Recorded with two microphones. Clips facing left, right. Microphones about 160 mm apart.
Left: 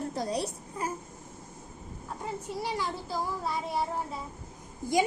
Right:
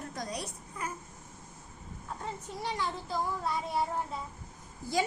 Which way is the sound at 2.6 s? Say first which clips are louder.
Right 1 dB; 5° left (ahead or behind).